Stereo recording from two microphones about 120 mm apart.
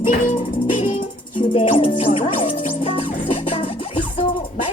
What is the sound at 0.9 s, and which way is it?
Music, 45° left (ahead or behind).